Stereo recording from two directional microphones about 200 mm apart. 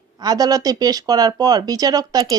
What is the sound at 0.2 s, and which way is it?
Speech, 20° right (ahead or behind).